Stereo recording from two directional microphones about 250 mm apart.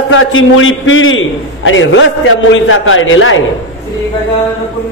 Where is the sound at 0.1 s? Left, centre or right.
Left.